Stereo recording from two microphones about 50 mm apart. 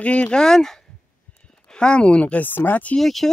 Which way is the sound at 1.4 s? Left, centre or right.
Centre.